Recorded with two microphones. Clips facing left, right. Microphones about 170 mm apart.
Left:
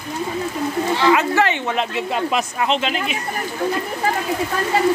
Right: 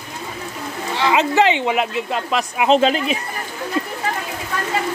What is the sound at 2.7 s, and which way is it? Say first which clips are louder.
Speech: right 9 dB; 40° right (ahead or behind).